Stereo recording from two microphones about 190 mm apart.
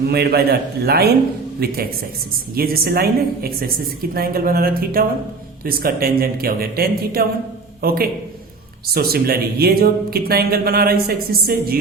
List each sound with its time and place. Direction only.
0.0 s a man's voice: 55° right (ahead or behind)